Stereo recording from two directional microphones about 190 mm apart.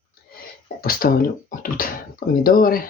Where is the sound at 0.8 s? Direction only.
50° left (ahead or behind).